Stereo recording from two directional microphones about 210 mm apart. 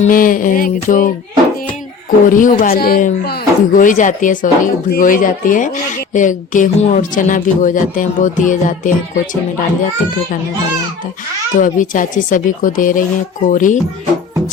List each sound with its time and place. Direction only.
0.0 s speech: 40° left (ahead or behind)
11.5 s speech: 40° left (ahead or behind)